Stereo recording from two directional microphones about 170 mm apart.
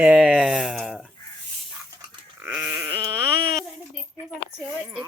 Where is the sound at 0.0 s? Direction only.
5° right (ahead or behind).